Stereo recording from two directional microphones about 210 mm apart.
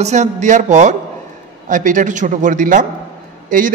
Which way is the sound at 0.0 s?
35° right (ahead or behind).